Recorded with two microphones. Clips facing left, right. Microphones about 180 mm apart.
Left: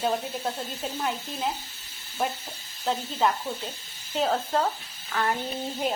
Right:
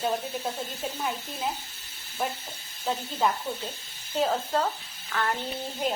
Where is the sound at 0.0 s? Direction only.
5° left (ahead or behind).